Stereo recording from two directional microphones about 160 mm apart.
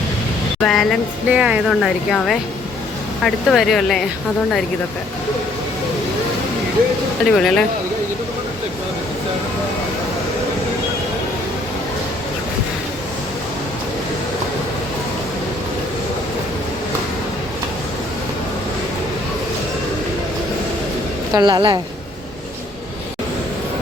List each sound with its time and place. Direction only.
0.6 s speech: centre (ahead or behind)
7.3 s speech: centre (ahead or behind)
21.3 s speech: 25° right (ahead or behind)